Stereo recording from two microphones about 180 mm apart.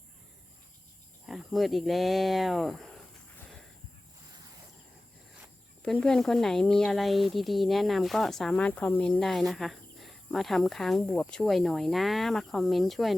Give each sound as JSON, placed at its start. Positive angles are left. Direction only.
{"t": 1.3, "sound": "speech", "side_deg": 0}
{"t": 5.8, "sound": "speech", "side_deg": 5}